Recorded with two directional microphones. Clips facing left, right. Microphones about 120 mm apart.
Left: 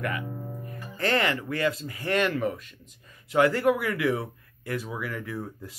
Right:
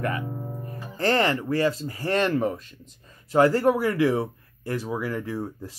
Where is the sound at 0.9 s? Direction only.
35° right (ahead or behind).